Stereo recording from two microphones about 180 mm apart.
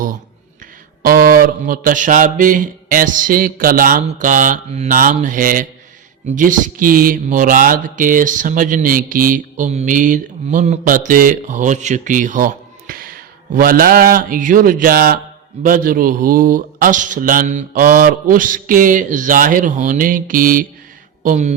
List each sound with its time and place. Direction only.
1.0 s speech: 55° right (ahead or behind)